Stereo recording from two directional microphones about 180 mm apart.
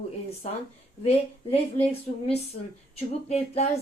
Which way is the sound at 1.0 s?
35° left (ahead or behind).